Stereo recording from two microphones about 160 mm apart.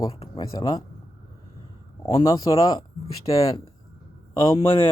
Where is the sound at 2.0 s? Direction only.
25° left (ahead or behind).